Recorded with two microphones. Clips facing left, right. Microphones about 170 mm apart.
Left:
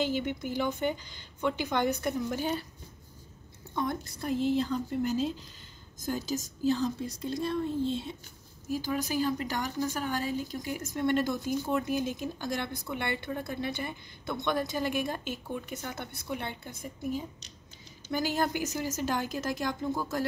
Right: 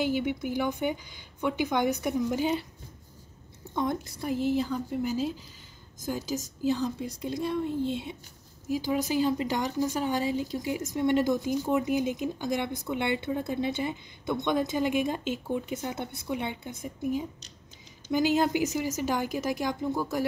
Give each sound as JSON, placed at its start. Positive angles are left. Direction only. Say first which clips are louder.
{"t": 0.0, "sound": "speech", "louder": "right 3 dB", "side_deg": -10}
{"t": 3.7, "sound": "a woman's voice", "louder": "right 3 dB", "side_deg": -20}